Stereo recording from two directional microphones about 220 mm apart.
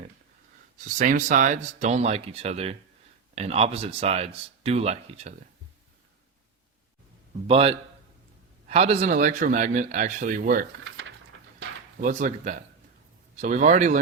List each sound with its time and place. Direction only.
0.9 s a man's voice: 35° right (ahead or behind)
7.4 s a man's voice: 25° right (ahead or behind)
11.9 s a man's voice: 35° right (ahead or behind)